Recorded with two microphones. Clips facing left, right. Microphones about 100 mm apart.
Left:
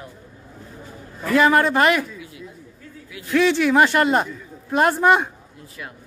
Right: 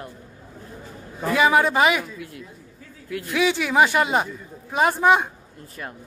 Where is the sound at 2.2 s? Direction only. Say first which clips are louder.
Right 1 dB; 55° right (ahead or behind).